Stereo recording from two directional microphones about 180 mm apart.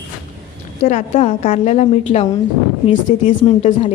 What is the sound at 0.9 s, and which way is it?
A woman's voice, 40° left (ahead or behind).